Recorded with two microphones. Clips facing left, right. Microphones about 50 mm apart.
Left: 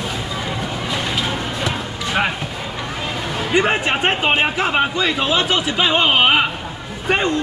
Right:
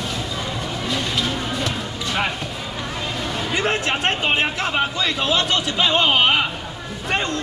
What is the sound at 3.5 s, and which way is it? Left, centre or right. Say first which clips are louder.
A man's voice: left 5 dB; centre.